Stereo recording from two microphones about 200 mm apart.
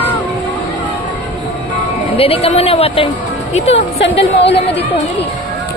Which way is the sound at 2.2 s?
30° left (ahead or behind).